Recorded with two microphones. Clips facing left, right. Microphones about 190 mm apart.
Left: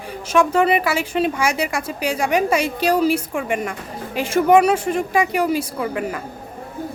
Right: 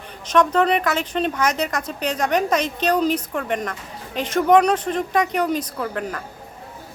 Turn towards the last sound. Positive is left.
turn(degrees=10)  # may be behind; listen again after turning